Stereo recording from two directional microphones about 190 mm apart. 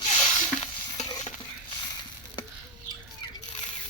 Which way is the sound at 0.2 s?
40° left (ahead or behind).